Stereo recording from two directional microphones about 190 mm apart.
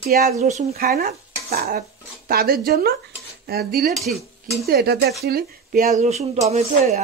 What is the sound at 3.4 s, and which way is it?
Speech, 55° right (ahead or behind).